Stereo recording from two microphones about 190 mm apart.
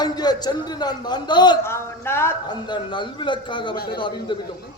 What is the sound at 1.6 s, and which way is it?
Speech, 15° left (ahead or behind).